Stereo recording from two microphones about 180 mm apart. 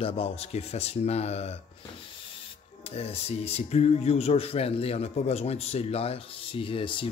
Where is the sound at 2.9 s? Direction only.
35° left (ahead or behind).